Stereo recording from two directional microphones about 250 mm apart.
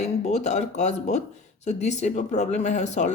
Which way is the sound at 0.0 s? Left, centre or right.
Left.